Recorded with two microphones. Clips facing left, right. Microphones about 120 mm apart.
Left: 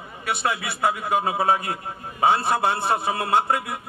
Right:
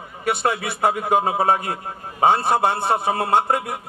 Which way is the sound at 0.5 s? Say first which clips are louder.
Right 3 dB; 50° right (ahead or behind).